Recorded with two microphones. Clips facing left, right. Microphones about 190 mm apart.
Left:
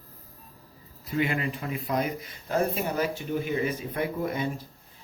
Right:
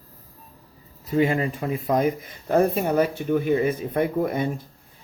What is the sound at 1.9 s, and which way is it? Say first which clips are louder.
Speech: right 7 dB; 50° right (ahead or behind).